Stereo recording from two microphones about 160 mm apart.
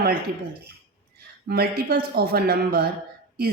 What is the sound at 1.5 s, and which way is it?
A woman's voice, 70° right (ahead or behind).